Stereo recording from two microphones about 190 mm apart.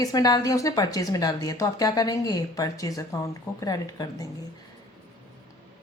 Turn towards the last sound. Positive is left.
turn(degrees=20)  # may be behind; listen again after turning